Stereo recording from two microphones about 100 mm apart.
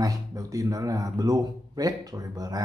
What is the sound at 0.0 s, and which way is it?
Speech, 35° right (ahead or behind).